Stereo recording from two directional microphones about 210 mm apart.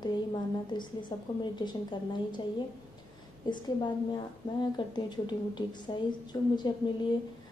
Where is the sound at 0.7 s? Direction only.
20° left (ahead or behind).